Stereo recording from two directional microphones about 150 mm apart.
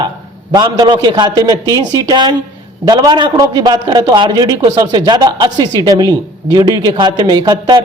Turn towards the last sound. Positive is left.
turn(degrees=-30)  # may be behind; listen again after turning